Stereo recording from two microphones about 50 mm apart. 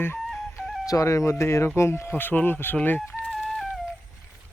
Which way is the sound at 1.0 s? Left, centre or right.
Left.